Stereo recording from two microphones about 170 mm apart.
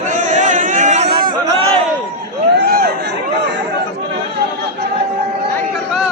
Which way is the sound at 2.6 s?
70° right (ahead or behind).